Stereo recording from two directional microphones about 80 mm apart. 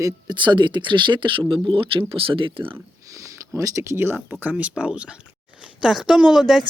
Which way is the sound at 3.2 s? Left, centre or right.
Right.